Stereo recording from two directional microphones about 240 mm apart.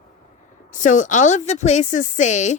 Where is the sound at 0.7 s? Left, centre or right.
Left.